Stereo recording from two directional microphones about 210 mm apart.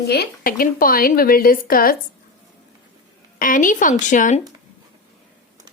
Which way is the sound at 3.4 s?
40° left (ahead or behind).